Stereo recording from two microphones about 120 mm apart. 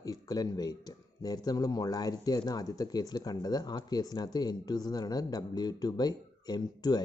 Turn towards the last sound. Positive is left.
turn(degrees=35)  # may be behind; listen again after turning